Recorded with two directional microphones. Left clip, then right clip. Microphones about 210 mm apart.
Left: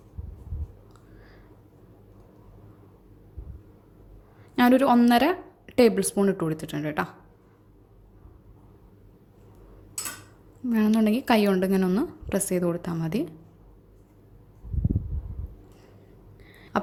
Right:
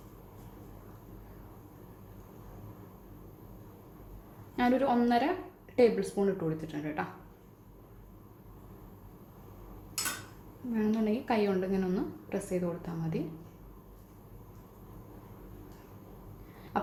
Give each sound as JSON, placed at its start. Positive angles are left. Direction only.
{"t": 4.5, "sound": "a woman's voice", "side_deg": 50}
{"t": 10.7, "sound": "a woman's voice", "side_deg": 45}
{"t": 16.7, "sound": "a sound", "side_deg": 45}